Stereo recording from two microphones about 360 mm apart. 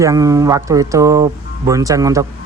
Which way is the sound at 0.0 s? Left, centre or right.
Centre.